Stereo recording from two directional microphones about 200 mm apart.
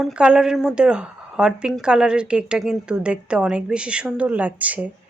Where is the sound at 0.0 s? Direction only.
5° right (ahead or behind).